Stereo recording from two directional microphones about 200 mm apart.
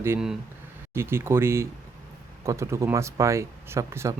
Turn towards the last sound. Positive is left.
turn(degrees=-15)  # may be behind; listen again after turning